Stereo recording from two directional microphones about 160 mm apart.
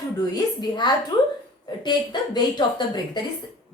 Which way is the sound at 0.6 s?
25° left (ahead or behind).